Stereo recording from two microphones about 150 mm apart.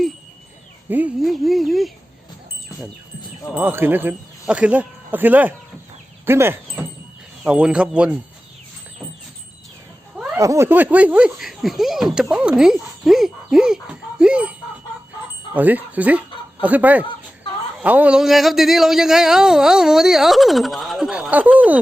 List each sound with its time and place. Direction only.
0.9 s speech: 10° right (ahead or behind)
1.2 s speech: centre (ahead or behind)
3.5 s speech: 15° right (ahead or behind)
10.3 s speech: 20° right (ahead or behind)
15.5 s speech: 10° right (ahead or behind)